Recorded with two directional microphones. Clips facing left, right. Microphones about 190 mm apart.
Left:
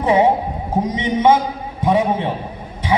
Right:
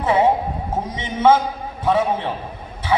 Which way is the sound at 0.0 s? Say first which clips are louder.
Left 2 dB; 15° left (ahead or behind).